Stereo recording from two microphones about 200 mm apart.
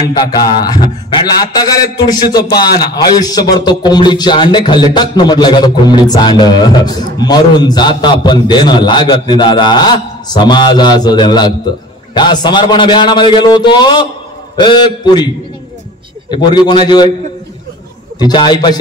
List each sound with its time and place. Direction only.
0.1 s a man's voice: 20° left (ahead or behind)
16.3 s a man's voice: 20° left (ahead or behind)
18.2 s a man's voice: 20° left (ahead or behind)